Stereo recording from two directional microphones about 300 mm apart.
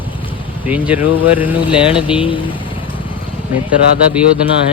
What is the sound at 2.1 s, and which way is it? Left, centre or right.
Speech, centre.